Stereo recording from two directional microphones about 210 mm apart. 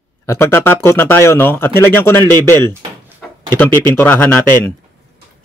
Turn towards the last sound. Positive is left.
turn(degrees=10)  # may be behind; listen again after turning